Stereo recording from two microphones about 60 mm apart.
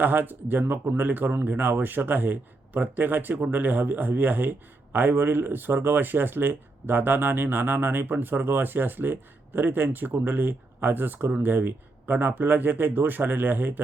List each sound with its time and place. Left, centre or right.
0.0 s a man's voice: right